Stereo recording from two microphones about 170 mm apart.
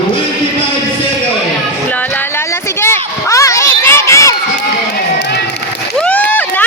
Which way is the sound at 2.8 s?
15° left (ahead or behind).